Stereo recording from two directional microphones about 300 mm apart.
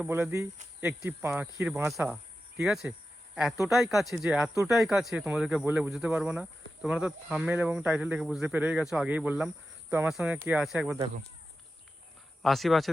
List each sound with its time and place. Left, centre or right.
0.0 s cricket: centre
2.6 s speech: centre
12.4 s speech: centre